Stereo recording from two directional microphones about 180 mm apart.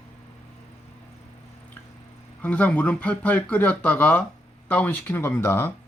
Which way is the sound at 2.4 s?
10° left (ahead or behind).